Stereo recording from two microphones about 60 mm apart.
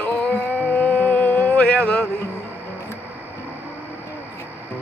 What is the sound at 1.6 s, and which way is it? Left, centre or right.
Speech, centre.